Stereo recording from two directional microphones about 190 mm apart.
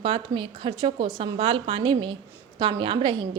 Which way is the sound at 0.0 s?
30° right (ahead or behind).